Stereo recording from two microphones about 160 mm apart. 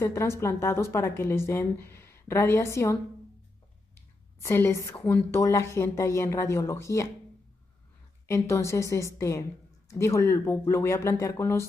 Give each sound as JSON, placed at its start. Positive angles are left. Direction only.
{"t": 0.0, "sound": "speech", "side_deg": 15}
{"t": 8.3, "sound": "speech", "side_deg": 15}